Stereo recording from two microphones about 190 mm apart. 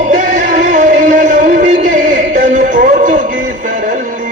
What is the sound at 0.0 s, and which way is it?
Music, 40° right (ahead or behind).